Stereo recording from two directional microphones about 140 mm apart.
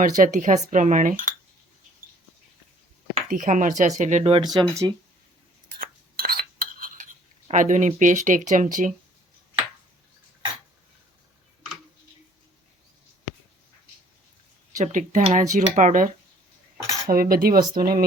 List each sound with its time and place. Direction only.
0.0 s speech: 70° right (ahead or behind)
3.2 s speech: 70° right (ahead or behind)
4.2 s speech: 40° right (ahead or behind)
4.7 s speech: 20° right (ahead or behind)
5.8 s a sound: 90° right; by 7.1 s 70° right (ahead or behind)
7.5 s speech: 65° right (ahead or behind)
14.8 s speech: 60° right (ahead or behind)
17.1 s cutlery: 90° right